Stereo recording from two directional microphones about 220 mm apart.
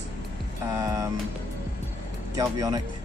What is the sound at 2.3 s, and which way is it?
Speech, 15° right (ahead or behind).